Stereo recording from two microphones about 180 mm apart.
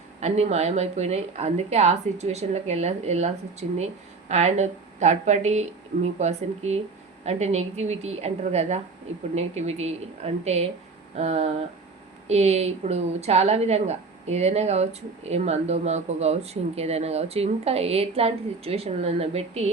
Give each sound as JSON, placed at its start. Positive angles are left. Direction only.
{"t": 0.2, "sound": "speech", "side_deg": -35}